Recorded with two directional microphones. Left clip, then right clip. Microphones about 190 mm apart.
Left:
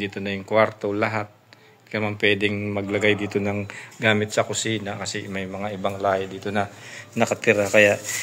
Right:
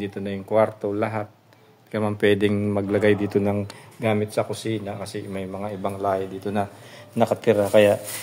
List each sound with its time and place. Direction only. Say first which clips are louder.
0.0 s speech: left 2 dB; 10° right (ahead or behind)
2.0 s speech: right 1 dB; 40° right (ahead or behind); by 3.6 s 20° right (ahead or behind)
4.0 s speech: left 3 dB; 5° right (ahead or behind)